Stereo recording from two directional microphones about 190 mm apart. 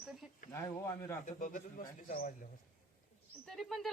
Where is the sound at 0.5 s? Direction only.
15° left (ahead or behind).